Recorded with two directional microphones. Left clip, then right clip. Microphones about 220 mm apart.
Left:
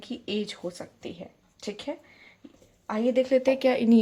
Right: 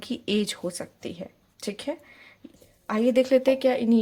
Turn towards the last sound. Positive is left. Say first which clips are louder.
# even
turn(degrees=5)  # may be behind; listen again after turning